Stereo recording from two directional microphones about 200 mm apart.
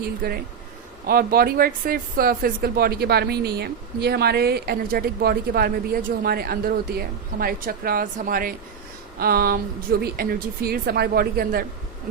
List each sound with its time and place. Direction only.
0.2 s speech: 50° right (ahead or behind)